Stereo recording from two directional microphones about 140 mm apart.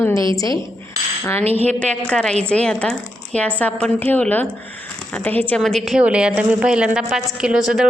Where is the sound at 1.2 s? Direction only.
15° left (ahead or behind).